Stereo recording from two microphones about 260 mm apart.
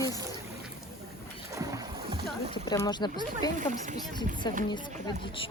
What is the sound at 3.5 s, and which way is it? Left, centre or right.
Speech, right.